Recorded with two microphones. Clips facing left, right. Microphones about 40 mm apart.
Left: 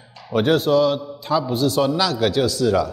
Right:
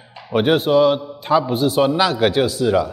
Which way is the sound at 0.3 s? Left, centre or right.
Right.